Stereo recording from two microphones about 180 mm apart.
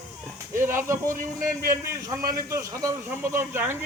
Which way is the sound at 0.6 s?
15° right (ahead or behind).